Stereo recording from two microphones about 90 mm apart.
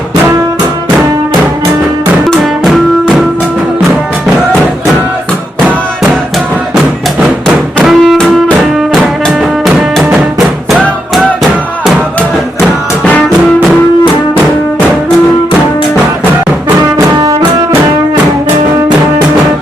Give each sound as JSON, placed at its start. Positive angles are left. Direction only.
{"t": 2.2, "sound": "music", "side_deg": 0}
{"t": 7.9, "sound": "music", "side_deg": 0}